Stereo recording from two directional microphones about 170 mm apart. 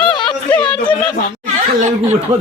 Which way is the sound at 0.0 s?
5° left (ahead or behind).